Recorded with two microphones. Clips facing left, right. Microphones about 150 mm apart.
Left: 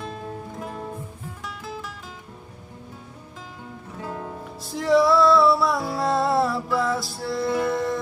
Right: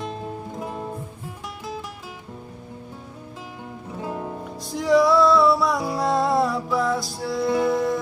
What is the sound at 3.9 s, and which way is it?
Music, 15° right (ahead or behind).